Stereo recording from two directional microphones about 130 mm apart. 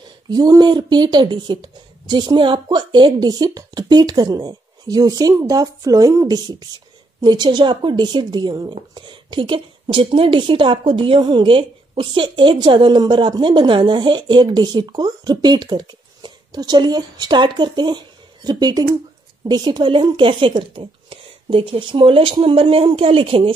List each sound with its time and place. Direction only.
0.3 s a woman's voice: 30° right (ahead or behind)